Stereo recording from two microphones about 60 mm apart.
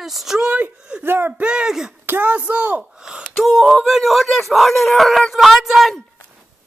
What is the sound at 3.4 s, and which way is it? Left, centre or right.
Speech, centre.